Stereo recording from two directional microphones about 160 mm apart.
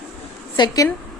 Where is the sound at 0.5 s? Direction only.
25° left (ahead or behind).